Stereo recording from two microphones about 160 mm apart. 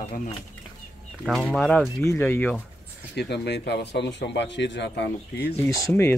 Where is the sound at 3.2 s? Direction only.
90° left.